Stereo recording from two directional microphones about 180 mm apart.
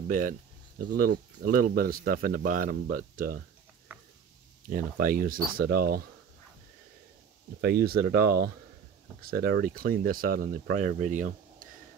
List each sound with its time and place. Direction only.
0.1 s speech: 50° right (ahead or behind)
4.6 s speech: 50° right (ahead or behind)
7.6 s speech: 60° right (ahead or behind)
9.2 s speech: 55° right (ahead or behind)